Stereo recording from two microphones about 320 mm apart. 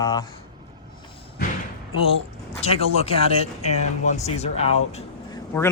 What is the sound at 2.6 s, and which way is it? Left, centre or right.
Speech, centre.